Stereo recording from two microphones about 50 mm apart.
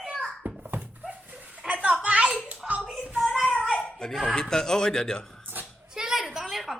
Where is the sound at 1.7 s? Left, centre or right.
Right.